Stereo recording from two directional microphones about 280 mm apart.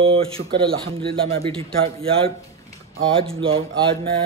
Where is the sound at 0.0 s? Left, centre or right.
Centre.